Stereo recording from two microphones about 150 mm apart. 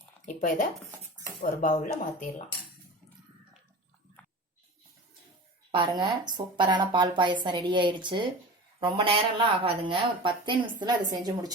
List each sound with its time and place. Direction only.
0.3 s speech: 65° left (ahead or behind)
5.7 s a woman's voice: 30° right (ahead or behind)